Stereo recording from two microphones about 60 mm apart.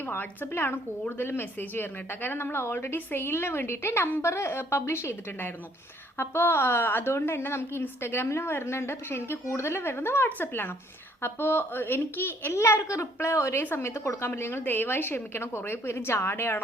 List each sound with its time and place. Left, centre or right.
0.0 s a woman's voice: left
13.6 s a woman's voice: left